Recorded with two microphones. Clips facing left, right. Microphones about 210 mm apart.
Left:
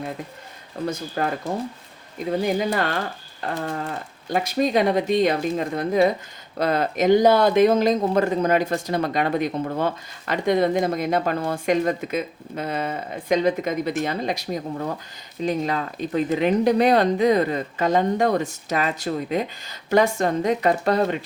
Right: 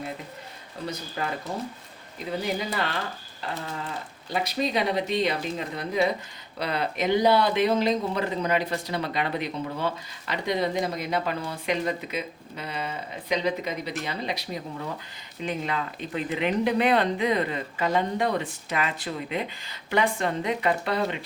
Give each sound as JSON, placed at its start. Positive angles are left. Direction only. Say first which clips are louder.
{"t": 0.9, "sound": "speech", "louder": "left 6 dB", "side_deg": 50}
{"t": 2.6, "sound": "speech", "louder": "left 6 dB", "side_deg": 50}